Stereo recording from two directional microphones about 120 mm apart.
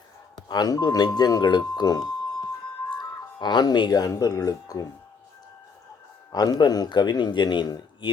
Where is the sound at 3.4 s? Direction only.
35° left (ahead or behind).